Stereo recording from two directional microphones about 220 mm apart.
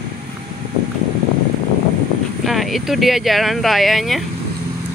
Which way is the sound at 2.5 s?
Centre (ahead or behind).